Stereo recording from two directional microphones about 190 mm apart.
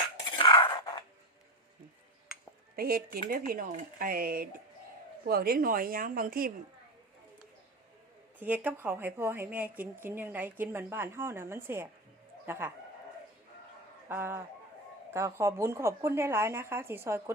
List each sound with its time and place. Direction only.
0.3 s dishes: 25° left (ahead or behind)
2.7 s speech: 50° right (ahead or behind)
8.4 s a woman's voice: 10° right (ahead or behind)
14.1 s a woman's voice: 10° right (ahead or behind)